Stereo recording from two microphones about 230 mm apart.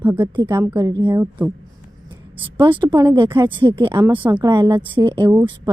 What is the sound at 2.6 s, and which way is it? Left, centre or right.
A woman's voice, centre.